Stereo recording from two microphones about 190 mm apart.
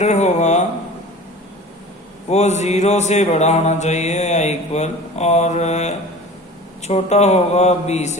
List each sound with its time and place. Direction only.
0.0 s speech: 35° left (ahead or behind)
2.3 s mantra: 35° left (ahead or behind)